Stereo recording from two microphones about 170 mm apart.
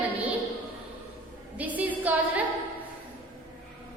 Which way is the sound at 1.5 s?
10° right (ahead or behind).